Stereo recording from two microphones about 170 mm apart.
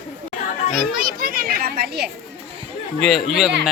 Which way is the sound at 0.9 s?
60° right (ahead or behind).